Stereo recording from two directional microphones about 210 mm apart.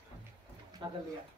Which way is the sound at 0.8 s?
20° right (ahead or behind).